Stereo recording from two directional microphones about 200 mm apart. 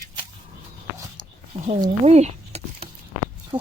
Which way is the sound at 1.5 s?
30° right (ahead or behind).